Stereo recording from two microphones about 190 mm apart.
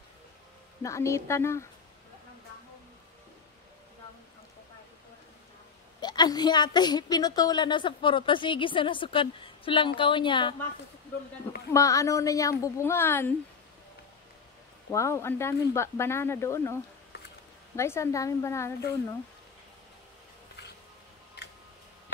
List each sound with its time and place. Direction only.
0.8 s speech: 15° left (ahead or behind)
5.9 s a woman's voice: 20° left (ahead or behind)
11.7 s speech: 15° left (ahead or behind)
14.9 s speech: 15° left (ahead or behind)
17.7 s speech: 15° left (ahead or behind)